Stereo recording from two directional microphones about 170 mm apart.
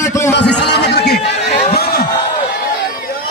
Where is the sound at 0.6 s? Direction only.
80° left.